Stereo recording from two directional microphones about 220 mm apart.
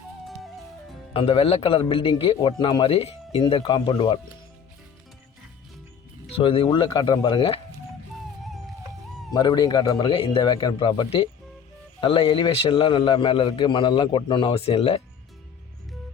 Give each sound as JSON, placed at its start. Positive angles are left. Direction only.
{"t": 1.1, "sound": "a man's voice", "side_deg": 25}
{"t": 6.3, "sound": "a man's voice", "side_deg": 25}
{"t": 9.3, "sound": "a man's voice", "side_deg": 20}